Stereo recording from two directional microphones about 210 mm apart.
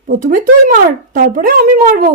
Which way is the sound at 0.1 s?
40° right (ahead or behind).